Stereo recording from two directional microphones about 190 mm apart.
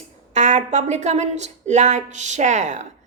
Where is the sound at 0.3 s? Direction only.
40° right (ahead or behind).